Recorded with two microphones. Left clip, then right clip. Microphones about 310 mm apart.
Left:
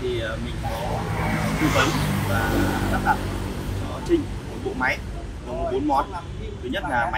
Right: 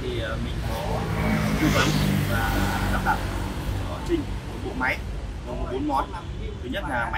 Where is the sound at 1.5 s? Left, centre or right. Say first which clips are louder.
Left 3 dB; left.